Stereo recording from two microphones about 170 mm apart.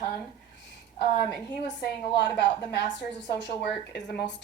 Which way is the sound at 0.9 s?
70° left (ahead or behind).